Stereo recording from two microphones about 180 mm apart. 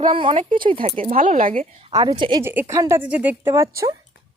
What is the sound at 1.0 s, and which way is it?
Speech, 45° right (ahead or behind).